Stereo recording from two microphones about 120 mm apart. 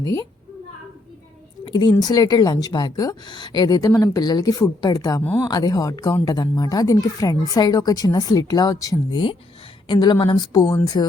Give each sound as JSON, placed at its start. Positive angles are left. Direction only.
{"t": 0.0, "sound": "a child's voice", "side_deg": 30}
{"t": 1.6, "sound": "a woman's voice", "side_deg": 40}